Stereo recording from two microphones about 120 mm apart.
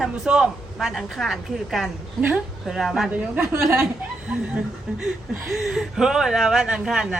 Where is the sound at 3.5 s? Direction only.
25° right (ahead or behind).